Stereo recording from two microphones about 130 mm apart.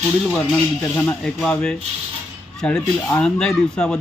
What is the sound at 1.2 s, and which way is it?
A man's voice, 5° left (ahead or behind).